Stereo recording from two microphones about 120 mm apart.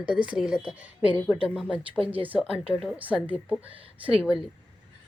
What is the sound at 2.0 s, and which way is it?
Speech, 50° right (ahead or behind).